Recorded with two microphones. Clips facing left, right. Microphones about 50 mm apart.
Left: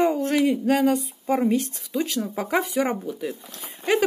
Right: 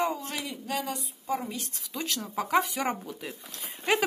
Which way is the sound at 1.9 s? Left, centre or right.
Centre.